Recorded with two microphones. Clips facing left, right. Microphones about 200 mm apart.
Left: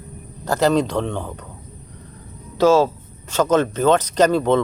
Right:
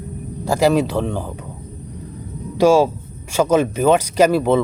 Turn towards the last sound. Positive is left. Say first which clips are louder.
# right 2 dB
turn(degrees=-10)  # may be behind; listen again after turning